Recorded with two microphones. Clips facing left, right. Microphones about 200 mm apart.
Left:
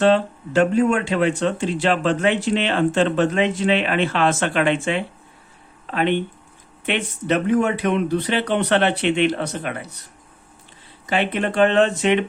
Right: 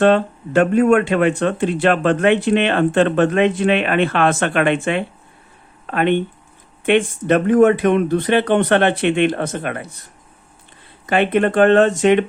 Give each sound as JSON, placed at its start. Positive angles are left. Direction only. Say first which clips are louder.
{"t": 0.0, "sound": "speech", "louder": "right 3 dB", "side_deg": -55}
{"t": 11.0, "sound": "speech", "louder": "right 6 dB", "side_deg": -55}